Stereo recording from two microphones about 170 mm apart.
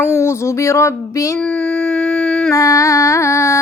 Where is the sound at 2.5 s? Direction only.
20° left (ahead or behind).